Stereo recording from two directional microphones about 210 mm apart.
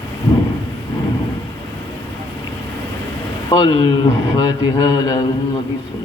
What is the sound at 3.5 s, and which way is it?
Speech, 20° left (ahead or behind).